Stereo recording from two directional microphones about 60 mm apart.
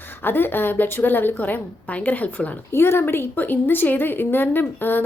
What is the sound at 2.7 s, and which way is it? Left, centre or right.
Speech, left.